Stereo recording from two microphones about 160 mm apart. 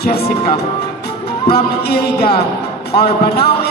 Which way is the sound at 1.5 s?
85° left.